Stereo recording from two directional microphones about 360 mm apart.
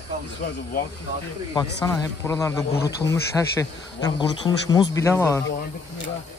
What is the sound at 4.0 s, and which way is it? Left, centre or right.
A man's voice, centre.